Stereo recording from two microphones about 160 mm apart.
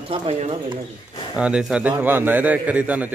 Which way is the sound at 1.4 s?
5° right (ahead or behind).